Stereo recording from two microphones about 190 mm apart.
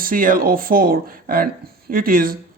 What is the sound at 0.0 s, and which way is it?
Speech, 45° right (ahead or behind).